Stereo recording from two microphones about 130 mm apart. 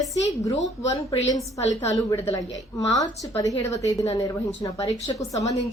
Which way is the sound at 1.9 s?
25° left (ahead or behind).